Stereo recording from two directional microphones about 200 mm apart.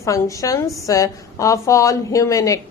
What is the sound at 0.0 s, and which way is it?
A woman's voice, 15° left (ahead or behind).